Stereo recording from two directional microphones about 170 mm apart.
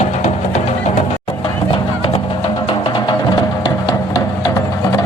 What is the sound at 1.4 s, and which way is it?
Music, 30° left (ahead or behind).